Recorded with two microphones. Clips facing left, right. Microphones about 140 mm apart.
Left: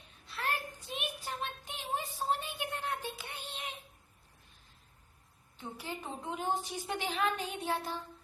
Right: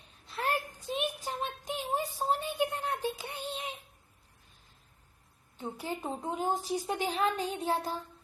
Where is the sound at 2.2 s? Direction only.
40° right (ahead or behind).